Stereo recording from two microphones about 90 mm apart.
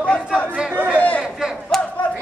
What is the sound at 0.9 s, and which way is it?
Chatter, 20° left (ahead or behind).